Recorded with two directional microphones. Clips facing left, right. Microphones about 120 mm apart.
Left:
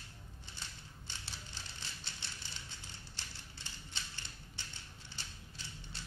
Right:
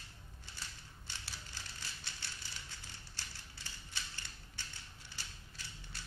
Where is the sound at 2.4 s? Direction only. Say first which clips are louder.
Even; 20° left (ahead or behind).